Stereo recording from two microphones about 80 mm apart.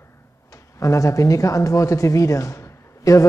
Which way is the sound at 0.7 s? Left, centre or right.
Left.